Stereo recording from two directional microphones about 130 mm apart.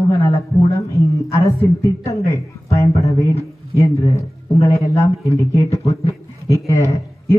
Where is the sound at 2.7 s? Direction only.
25° left (ahead or behind).